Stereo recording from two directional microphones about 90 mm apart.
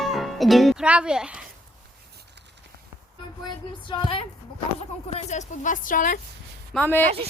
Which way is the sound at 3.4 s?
55° left (ahead or behind).